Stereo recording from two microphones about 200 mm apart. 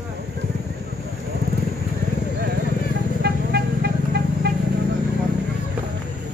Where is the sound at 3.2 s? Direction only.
55° right (ahead or behind).